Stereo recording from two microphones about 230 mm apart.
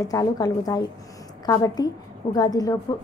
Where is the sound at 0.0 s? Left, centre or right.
Centre.